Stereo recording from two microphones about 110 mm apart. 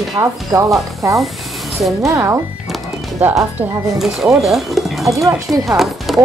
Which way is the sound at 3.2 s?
15° right (ahead or behind).